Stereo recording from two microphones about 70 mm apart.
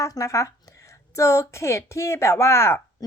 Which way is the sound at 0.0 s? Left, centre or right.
Left.